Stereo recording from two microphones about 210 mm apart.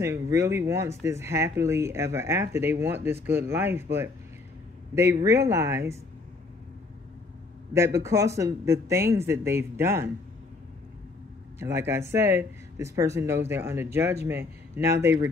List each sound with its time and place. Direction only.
0.0 s speech: 15° right (ahead or behind)
7.7 s speech: 15° right (ahead or behind)
11.6 s speech: 10° right (ahead or behind)